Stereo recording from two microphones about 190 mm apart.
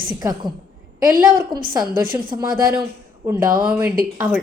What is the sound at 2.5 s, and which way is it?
Speech, 50° right (ahead or behind).